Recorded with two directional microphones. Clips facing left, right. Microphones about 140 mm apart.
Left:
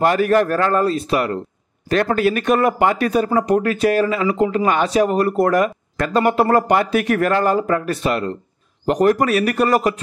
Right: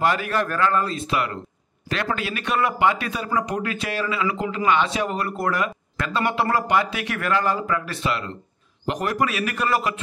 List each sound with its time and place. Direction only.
0.0 s a man's voice: 45° left (ahead or behind)